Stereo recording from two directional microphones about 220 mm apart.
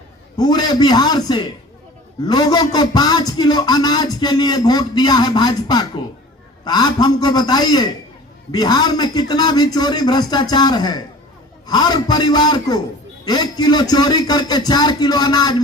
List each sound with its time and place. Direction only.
0.3 s a man's voice: 20° left (ahead or behind)